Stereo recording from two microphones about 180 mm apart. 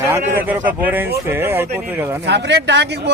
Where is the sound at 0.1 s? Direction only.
10° right (ahead or behind).